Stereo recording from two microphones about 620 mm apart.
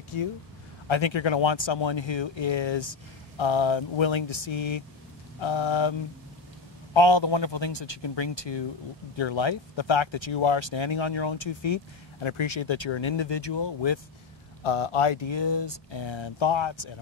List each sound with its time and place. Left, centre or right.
0.1 s speech: left
14.6 s speech: left